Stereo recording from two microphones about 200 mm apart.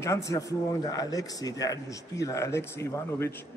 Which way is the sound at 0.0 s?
15° left (ahead or behind).